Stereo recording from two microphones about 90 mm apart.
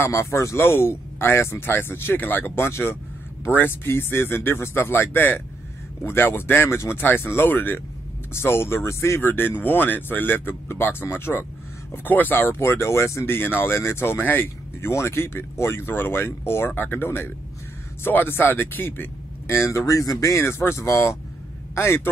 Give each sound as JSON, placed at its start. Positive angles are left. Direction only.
{"t": 0.0, "sound": "speech", "side_deg": 30}